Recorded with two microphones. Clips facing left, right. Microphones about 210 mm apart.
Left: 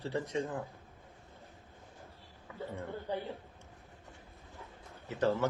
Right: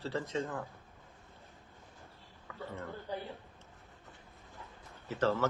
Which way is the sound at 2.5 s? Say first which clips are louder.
Left 3 dB; 20° left (ahead or behind).